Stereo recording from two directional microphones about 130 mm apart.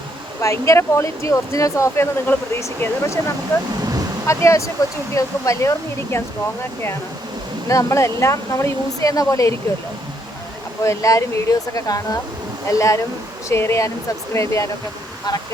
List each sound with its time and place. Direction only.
0.4 s speech: 20° left (ahead or behind)
3.8 s a sound: 30° right (ahead or behind)
4.3 s speech: 25° left (ahead or behind)
7.7 s speech: 25° left (ahead or behind)
10.8 s speech: 25° left (ahead or behind)